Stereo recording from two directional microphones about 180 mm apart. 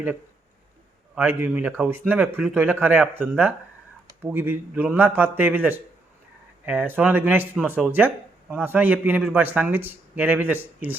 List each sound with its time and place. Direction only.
1.1 s speech: 10° right (ahead or behind)